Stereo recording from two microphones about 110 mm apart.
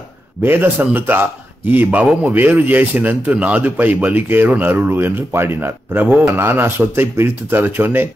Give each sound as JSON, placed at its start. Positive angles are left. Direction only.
{"t": 0.4, "sound": "a man's voice", "side_deg": -20}